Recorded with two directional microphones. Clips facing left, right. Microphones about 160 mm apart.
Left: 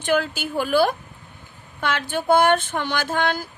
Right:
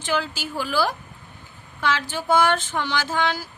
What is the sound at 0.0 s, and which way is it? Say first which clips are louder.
Speech: left 4 dB; 55° left (ahead or behind).